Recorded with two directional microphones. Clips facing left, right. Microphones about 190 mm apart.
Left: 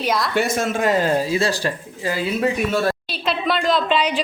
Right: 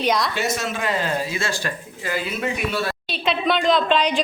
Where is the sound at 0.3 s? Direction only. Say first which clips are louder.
Left 5 dB; 55° left (ahead or behind); by 2.5 s 30° left (ahead or behind).